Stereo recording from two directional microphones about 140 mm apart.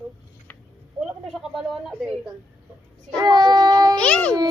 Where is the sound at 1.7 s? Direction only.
Centre (ahead or behind).